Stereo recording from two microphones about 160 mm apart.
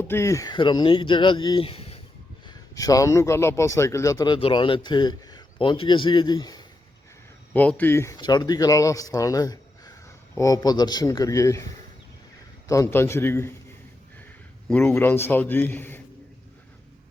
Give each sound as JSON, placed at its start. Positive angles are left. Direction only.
{"t": 0.0, "sound": "speech", "side_deg": 15}
{"t": 2.5, "sound": "speech", "side_deg": 20}
{"t": 7.5, "sound": "a man's voice", "side_deg": 10}
{"t": 14.7, "sound": "a man's voice", "side_deg": 10}